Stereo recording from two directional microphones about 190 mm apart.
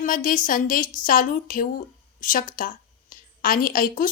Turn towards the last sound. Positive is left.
turn(degrees=45)  # may be behind; listen again after turning